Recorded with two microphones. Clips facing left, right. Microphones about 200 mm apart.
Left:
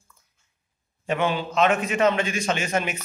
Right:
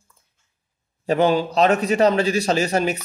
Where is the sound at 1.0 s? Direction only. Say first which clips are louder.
Right 7 dB; 35° right (ahead or behind).